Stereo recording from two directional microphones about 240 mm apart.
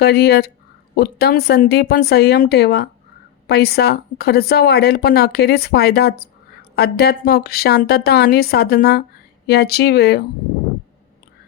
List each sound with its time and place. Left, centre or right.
0.0 s speech: left